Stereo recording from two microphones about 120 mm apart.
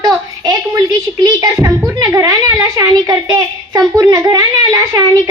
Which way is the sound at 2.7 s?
35° right (ahead or behind).